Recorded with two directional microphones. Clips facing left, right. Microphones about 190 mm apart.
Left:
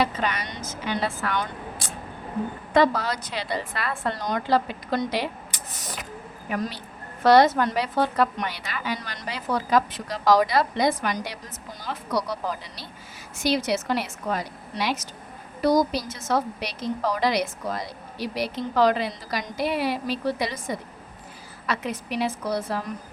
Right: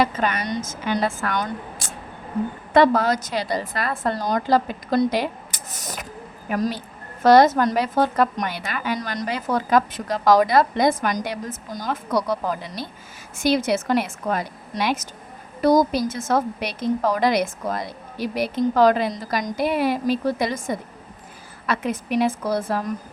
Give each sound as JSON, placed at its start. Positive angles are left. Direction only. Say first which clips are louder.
{"t": 0.0, "sound": "a woman's voice", "louder": "right 4 dB", "side_deg": -45}
{"t": 2.7, "sound": "a woman's voice", "louder": "right 4 dB", "side_deg": -55}